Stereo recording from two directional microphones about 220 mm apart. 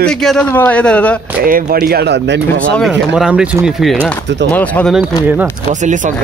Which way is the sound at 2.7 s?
Centre (ahead or behind).